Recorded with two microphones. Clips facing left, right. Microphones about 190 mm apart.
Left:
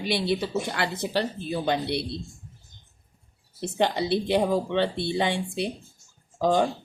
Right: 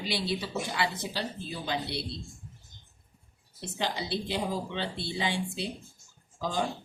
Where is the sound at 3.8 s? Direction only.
60° left (ahead or behind).